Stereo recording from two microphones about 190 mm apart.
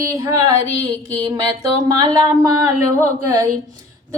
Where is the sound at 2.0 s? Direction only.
20° right (ahead or behind).